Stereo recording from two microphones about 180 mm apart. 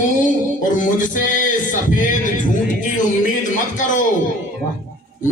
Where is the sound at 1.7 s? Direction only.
45° left (ahead or behind).